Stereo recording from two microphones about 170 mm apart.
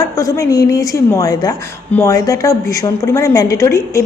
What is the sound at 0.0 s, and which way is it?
A woman's voice, 20° left (ahead or behind).